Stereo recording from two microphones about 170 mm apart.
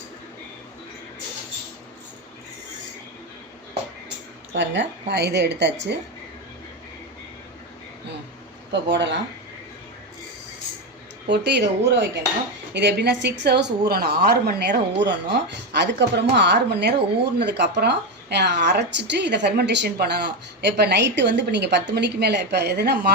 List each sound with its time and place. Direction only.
4.5 s a woman's voice: 90° right
8.7 s a woman's voice: 90° right
11.3 s speech: 85° right